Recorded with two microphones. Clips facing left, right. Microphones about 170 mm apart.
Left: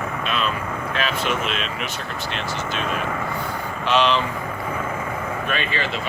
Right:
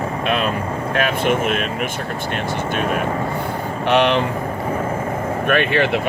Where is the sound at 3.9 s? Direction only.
60° right (ahead or behind).